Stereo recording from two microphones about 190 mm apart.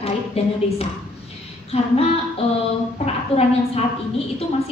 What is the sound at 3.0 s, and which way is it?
Speech, 35° left (ahead or behind).